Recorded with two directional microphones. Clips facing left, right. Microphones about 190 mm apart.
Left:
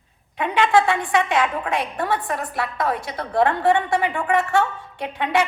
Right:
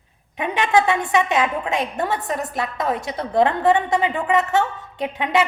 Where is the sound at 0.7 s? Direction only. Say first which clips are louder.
Right 3 dB; 20° right (ahead or behind).